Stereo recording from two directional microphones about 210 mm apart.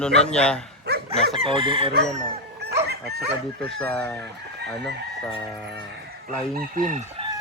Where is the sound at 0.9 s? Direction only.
50° right (ahead or behind).